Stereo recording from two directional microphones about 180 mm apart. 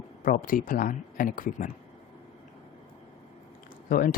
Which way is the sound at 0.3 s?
50° left (ahead or behind).